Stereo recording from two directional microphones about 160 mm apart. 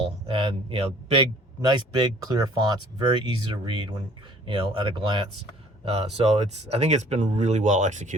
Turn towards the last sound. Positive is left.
turn(degrees=-50)  # may be behind; listen again after turning